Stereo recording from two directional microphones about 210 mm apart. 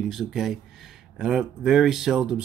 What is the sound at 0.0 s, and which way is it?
Speech, centre (ahead or behind).